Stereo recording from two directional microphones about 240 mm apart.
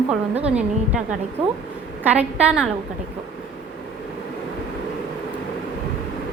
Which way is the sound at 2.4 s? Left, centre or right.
Centre.